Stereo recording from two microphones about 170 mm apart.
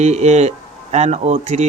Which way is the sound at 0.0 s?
40° right (ahead or behind).